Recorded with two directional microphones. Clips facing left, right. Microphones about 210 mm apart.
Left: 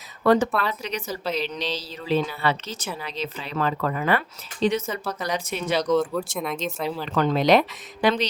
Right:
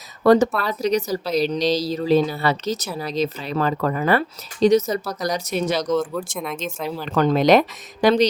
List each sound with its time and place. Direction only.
0.2 s a woman's voice: 40° right (ahead or behind)
6.3 s speech: centre (ahead or behind)
7.1 s a woman's voice: 40° right (ahead or behind)